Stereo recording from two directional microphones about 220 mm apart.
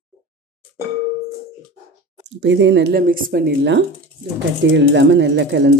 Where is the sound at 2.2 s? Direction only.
55° right (ahead or behind).